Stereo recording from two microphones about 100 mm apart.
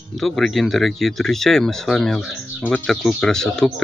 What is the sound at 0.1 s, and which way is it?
Speech, centre (ahead or behind).